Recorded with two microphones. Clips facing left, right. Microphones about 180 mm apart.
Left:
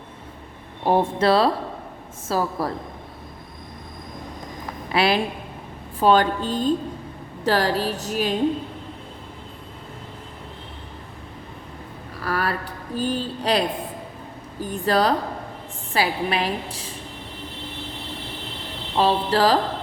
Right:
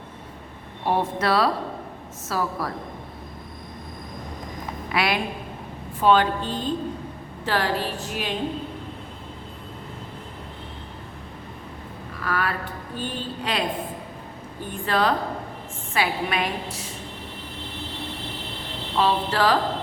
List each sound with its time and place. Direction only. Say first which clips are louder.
0.9 s speech: left 4 dB; 30° left (ahead or behind)
4.9 s a woman's voice: left 4 dB; 30° left (ahead or behind)
12.2 s a woman's voice: left 2 dB; 35° left (ahead or behind)
18.9 s a woman's voice: left 3 dB; 35° left (ahead or behind)